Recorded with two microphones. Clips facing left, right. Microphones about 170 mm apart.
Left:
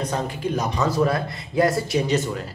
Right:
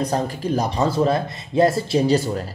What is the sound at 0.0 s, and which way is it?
Speech, 35° right (ahead or behind).